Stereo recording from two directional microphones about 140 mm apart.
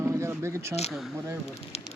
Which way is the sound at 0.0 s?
20° right (ahead or behind).